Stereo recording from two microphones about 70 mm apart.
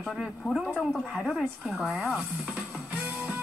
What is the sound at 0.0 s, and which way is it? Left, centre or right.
Speech, centre.